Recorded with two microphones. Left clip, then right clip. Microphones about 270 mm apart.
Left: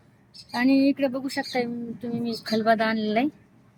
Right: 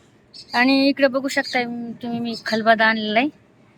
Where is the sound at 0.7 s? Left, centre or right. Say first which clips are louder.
Right 3 dB; centre.